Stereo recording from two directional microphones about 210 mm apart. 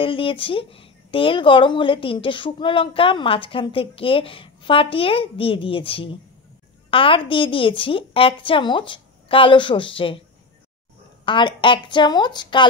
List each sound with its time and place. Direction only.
0.0 s speech: 25° left (ahead or behind)
11.2 s speech: 25° left (ahead or behind)